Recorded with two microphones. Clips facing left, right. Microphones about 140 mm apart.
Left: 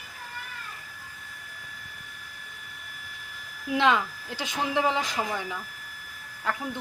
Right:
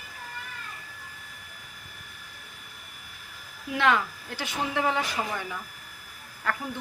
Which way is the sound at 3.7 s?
20° left (ahead or behind).